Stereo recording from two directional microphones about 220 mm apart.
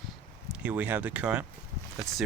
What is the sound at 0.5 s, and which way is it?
Speech, 5° right (ahead or behind).